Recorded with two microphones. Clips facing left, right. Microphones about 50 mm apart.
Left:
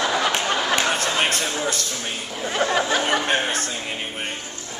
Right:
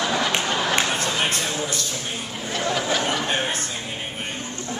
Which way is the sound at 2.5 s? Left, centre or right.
Left.